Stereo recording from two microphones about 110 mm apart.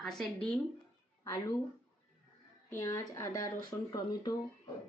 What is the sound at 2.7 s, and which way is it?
Speech, 25° left (ahead or behind).